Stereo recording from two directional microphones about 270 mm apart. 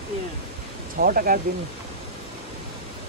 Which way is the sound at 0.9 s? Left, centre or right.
Right.